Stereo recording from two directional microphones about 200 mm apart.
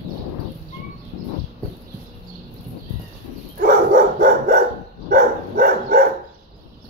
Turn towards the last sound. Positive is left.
turn(degrees=-45)  # may be behind; listen again after turning